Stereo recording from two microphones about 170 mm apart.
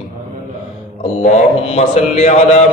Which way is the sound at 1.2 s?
40° left (ahead or behind).